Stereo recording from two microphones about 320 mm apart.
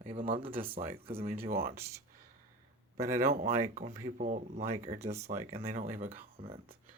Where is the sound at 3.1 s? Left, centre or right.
Right.